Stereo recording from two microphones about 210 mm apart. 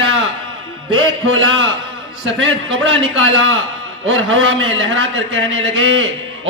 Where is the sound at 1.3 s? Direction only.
70° right (ahead or behind).